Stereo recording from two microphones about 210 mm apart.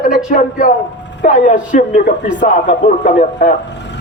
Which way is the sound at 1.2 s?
35° left (ahead or behind).